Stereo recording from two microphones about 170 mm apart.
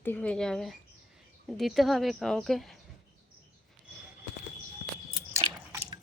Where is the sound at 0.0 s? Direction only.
10° left (ahead or behind).